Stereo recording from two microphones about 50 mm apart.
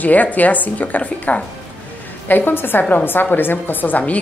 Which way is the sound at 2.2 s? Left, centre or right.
Left.